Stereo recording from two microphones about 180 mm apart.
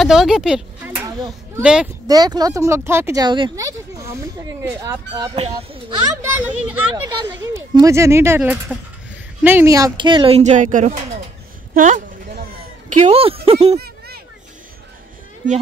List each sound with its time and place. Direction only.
0.0 s speech: centre (ahead or behind)
2.0 s speech: 20° right (ahead or behind)
5.3 s speech: 35° right (ahead or behind)
6.2 s speech: 10° right (ahead or behind)
7.1 s speech: 25° right (ahead or behind); by 11.2 s 40° right (ahead or behind)
11.8 s a sound: 50° right (ahead or behind)
12.9 s speech: 35° right (ahead or behind)
13.7 s a sound: 60° right (ahead or behind)